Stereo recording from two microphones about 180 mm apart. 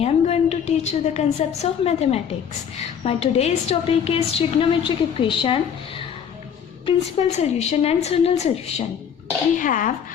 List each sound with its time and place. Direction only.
0.0 s a woman's voice: 35° left (ahead or behind)
6.8 s a woman's voice: 35° left (ahead or behind)
9.6 s speech: 45° left (ahead or behind)